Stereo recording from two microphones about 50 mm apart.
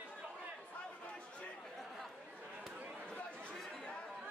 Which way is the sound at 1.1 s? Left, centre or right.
Left.